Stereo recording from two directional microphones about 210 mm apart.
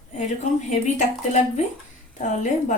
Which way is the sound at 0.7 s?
35° left (ahead or behind).